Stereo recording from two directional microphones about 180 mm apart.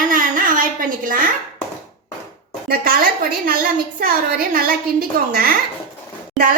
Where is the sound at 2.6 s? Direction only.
55° right (ahead or behind).